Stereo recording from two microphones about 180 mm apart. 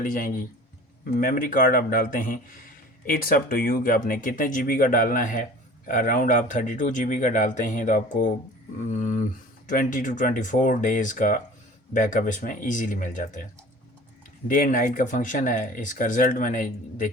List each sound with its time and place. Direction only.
0.0 s speech: 50° left (ahead or behind)
14.4 s speech: 50° left (ahead or behind)